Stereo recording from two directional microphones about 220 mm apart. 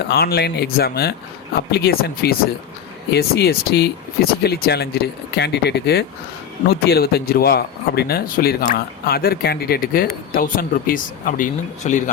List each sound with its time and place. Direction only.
0.1 s speech: 45° left (ahead or behind)